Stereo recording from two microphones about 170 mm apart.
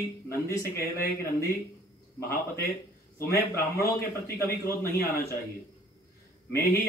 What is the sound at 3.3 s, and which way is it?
A man's voice, 15° left (ahead or behind).